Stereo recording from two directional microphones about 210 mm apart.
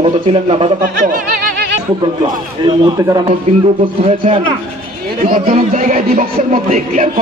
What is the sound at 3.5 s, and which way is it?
Speech, 30° right (ahead or behind).